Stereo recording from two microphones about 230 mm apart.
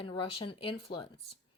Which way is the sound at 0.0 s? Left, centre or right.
Left.